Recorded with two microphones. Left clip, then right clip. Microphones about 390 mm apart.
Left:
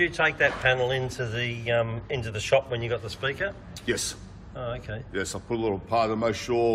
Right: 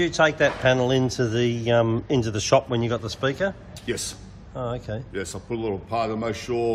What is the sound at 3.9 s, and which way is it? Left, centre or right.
A man's voice, centre.